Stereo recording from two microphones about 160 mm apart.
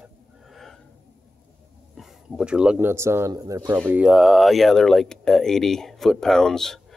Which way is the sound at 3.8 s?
5° right (ahead or behind).